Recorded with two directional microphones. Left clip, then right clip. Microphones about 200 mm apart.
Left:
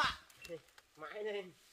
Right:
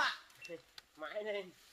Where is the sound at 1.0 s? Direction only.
5° left (ahead or behind).